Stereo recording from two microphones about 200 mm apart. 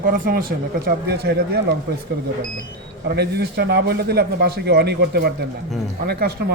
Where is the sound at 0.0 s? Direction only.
45° right (ahead or behind).